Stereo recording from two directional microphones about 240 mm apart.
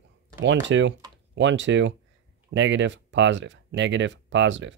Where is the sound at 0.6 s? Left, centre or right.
Right.